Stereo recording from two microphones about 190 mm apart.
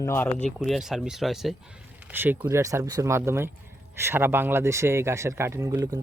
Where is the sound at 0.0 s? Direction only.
10° left (ahead or behind).